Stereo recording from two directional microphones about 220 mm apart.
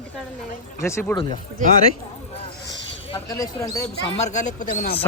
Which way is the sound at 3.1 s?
15° left (ahead or behind).